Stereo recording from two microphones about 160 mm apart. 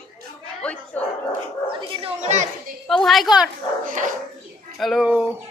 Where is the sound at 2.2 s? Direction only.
50° right (ahead or behind).